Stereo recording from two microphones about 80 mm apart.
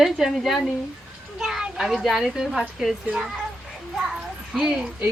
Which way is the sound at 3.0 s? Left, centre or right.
Centre.